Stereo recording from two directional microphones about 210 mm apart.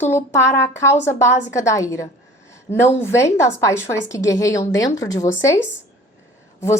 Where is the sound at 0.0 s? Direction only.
10° left (ahead or behind).